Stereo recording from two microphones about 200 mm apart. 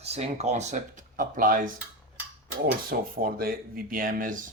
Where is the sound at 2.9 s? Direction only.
45° right (ahead or behind).